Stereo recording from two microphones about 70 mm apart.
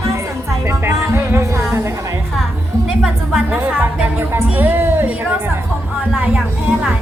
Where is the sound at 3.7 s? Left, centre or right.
Right.